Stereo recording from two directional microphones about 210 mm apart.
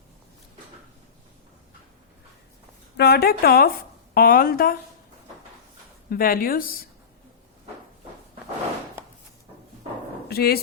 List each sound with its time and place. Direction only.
3.0 s a woman's voice: 50° left (ahead or behind)
6.1 s a woman's voice: 45° left (ahead or behind)
10.2 s speech: 50° left (ahead or behind)